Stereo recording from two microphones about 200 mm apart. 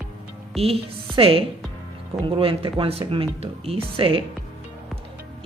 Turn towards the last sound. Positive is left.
turn(degrees=-25)  # may be behind; listen again after turning